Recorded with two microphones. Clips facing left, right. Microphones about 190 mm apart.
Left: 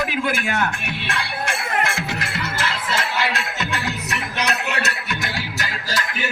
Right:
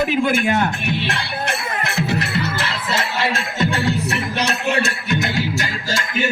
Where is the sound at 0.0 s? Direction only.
25° right (ahead or behind).